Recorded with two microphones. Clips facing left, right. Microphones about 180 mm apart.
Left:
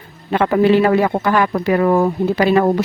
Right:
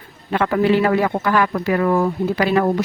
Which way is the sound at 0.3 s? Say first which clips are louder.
Left 3 dB; 25° left (ahead or behind).